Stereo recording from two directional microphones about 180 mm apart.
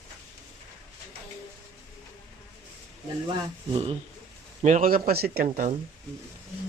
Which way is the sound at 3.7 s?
35° right (ahead or behind).